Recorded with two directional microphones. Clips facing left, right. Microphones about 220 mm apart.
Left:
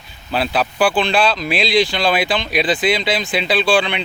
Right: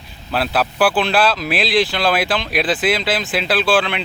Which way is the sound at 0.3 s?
Centre (ahead or behind).